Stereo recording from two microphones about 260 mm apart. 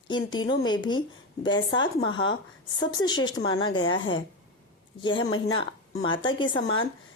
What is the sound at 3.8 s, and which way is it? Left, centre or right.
Speech, left.